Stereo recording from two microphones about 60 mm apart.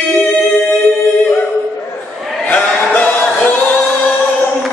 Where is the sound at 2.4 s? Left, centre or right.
Left.